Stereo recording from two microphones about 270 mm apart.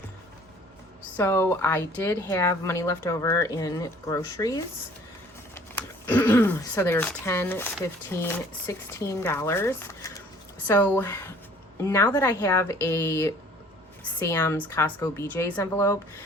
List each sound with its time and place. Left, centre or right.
1.1 s speech: centre